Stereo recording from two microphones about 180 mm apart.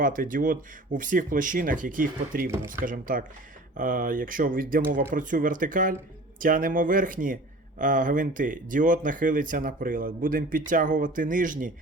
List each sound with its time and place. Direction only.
0.0 s speech: 50° right (ahead or behind)